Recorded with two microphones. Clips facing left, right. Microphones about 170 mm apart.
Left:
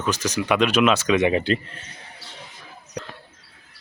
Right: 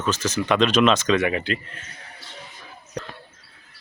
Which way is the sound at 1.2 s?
30° left (ahead or behind).